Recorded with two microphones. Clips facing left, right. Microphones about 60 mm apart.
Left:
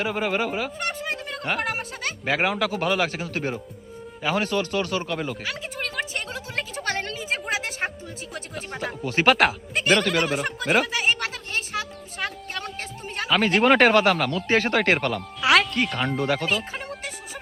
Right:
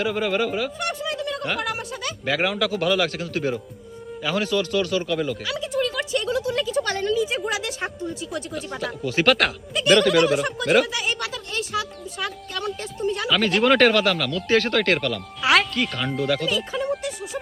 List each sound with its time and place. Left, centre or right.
0.0 s speech: centre
0.8 s a sound: left
1.5 s speech: left
2.2 s speech: centre
5.5 s a sound: left
8.3 s speech: left
9.0 s speech: centre
10.0 s speech: left
10.9 s a sound: left
13.3 s speech: centre
15.4 s music: centre
16.1 s speech: centre